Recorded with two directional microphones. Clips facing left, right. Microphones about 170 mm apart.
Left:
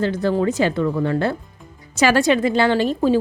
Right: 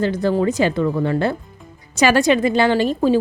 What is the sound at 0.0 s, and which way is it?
A woman's voice, 15° right (ahead or behind).